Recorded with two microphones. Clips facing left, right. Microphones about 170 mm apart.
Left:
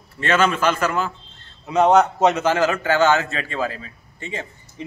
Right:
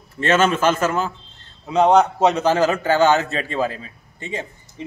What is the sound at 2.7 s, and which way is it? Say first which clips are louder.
A man's voice: right 1 dB; 20° right (ahead or behind).